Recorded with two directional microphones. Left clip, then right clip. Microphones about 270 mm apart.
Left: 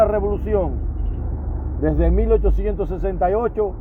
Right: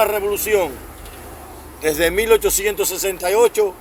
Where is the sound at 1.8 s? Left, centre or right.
Right.